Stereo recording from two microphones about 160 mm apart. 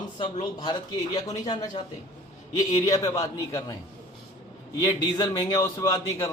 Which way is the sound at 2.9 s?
20° left (ahead or behind).